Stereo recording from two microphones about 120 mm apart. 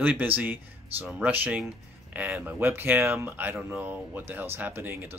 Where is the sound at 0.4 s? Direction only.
15° right (ahead or behind).